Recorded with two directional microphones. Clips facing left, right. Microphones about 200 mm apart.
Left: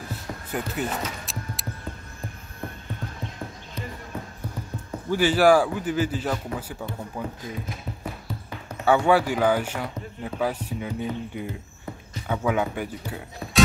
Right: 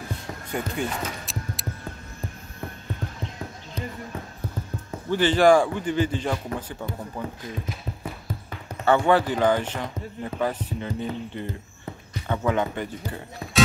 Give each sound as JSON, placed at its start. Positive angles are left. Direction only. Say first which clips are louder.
{"t": 0.5, "sound": "music", "louder": "even", "side_deg": 5}
{"t": 5.1, "sound": "speech", "louder": "right 1 dB", "side_deg": 10}
{"t": 8.8, "sound": "speech", "louder": "even", "side_deg": 10}